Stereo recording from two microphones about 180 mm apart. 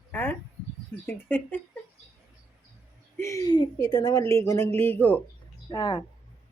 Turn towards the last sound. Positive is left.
turn(degrees=20)  # may be behind; listen again after turning